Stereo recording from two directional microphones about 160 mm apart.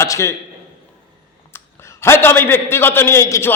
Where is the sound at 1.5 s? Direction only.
15° left (ahead or behind).